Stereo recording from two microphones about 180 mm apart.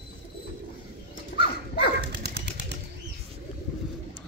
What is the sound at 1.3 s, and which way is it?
Dog, 65° left (ahead or behind).